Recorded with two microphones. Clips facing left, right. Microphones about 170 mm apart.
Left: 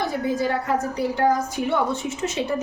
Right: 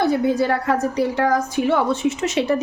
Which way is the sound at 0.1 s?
70° right (ahead or behind).